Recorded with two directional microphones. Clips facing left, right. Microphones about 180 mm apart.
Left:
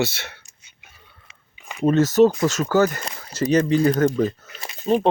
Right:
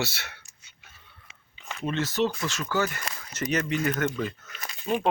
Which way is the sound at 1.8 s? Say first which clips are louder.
Left 11 dB; 40° left (ahead or behind).